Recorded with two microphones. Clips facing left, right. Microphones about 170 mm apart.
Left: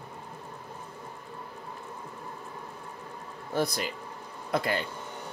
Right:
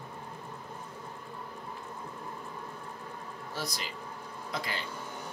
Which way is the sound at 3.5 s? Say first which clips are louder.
Left 10 dB; 55° left (ahead or behind).